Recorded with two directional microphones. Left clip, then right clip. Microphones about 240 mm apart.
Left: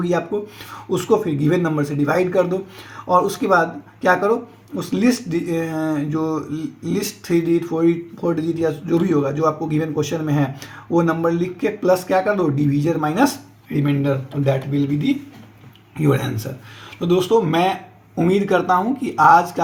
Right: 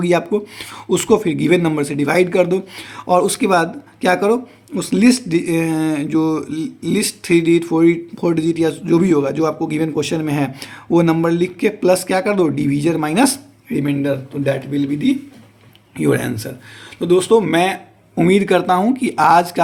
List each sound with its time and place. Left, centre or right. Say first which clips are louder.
0.3 s speech: right 4 dB; right